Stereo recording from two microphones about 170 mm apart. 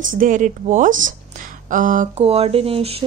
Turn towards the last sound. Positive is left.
turn(degrees=-35)  # may be behind; listen again after turning